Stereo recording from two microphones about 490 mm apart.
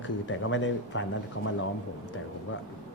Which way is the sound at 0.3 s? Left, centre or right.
Left.